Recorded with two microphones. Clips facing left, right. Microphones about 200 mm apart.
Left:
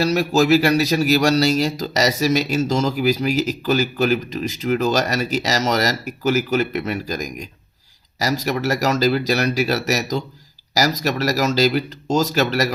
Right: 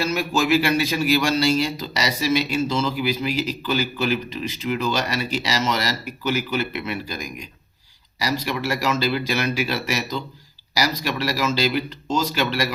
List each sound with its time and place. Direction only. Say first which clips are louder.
0.0 s a man's voice: left 5 dB; 40° left (ahead or behind)